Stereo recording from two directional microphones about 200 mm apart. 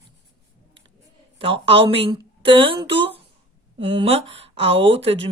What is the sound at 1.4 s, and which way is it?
Speech, 25° right (ahead or behind).